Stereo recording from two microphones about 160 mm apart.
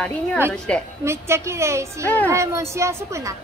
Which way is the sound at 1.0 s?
15° right (ahead or behind).